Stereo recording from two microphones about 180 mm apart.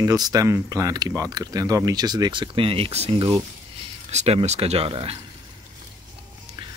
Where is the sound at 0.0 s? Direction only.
20° right (ahead or behind).